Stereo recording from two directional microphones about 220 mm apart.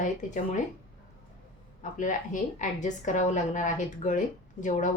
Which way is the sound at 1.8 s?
35° left (ahead or behind).